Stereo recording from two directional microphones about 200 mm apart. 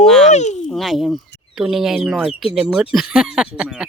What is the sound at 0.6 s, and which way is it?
Speech, centre (ahead or behind).